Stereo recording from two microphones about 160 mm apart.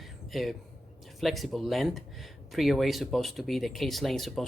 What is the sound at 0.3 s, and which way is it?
Speech, centre (ahead or behind).